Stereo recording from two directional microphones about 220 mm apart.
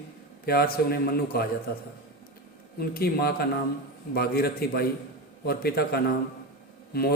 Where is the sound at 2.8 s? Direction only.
45° left (ahead or behind).